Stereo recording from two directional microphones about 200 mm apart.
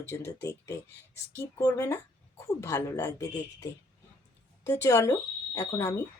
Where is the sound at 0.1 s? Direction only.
15° left (ahead or behind).